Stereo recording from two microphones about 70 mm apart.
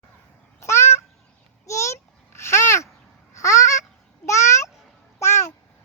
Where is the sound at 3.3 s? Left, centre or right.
Left.